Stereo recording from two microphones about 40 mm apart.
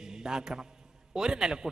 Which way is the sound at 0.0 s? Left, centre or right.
Centre.